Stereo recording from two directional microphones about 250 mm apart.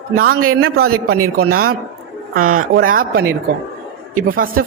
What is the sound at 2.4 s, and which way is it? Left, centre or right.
Speech, right.